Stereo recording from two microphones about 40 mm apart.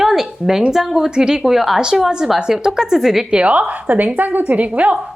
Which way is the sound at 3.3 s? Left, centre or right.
Right.